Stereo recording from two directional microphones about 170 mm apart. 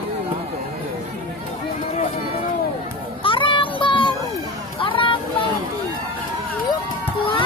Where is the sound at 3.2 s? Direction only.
30° left (ahead or behind).